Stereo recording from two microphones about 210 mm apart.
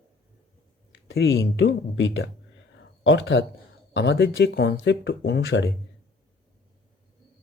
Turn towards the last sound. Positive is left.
turn(degrees=55)  # may be behind; listen again after turning